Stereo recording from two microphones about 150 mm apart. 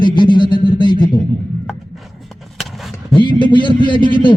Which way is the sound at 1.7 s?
Centre (ahead or behind).